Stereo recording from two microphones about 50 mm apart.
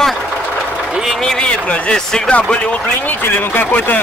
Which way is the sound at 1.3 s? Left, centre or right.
Centre.